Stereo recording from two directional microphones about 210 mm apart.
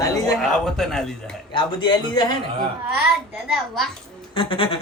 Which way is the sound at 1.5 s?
20° left (ahead or behind).